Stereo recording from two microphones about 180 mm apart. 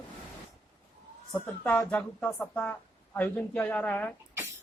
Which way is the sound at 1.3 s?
10° left (ahead or behind).